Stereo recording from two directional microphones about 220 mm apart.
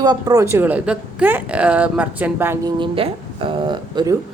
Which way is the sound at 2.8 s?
25° right (ahead or behind).